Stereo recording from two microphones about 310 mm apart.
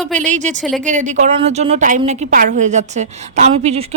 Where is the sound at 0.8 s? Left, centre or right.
Right.